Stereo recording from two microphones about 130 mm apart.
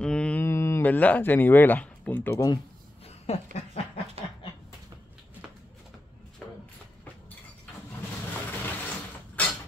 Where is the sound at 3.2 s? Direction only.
55° left (ahead or behind).